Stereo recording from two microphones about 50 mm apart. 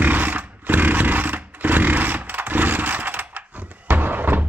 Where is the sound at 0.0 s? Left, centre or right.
Right.